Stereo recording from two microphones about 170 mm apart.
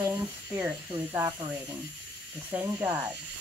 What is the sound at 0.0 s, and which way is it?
Speech, 15° right (ahead or behind).